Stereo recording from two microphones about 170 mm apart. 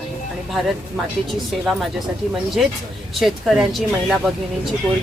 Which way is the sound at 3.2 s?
Centre (ahead or behind).